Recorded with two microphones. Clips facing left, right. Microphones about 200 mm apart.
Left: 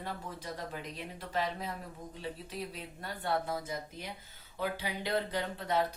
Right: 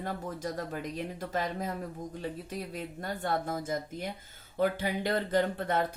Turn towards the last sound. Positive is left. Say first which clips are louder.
# right 5 dB
turn(degrees=-50)  # may be behind; listen again after turning